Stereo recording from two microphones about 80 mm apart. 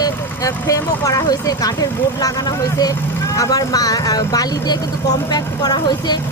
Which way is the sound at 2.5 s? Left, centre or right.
Left.